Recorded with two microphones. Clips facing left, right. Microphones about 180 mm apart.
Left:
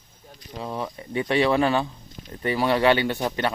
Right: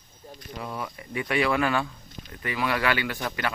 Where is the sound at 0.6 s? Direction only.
25° left (ahead or behind).